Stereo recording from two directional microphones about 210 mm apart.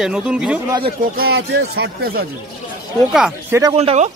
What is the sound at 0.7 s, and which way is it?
Speech, 20° right (ahead or behind).